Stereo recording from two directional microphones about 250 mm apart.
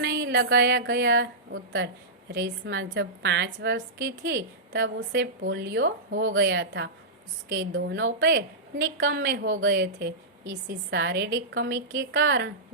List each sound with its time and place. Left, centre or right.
0.0 s a woman's voice: right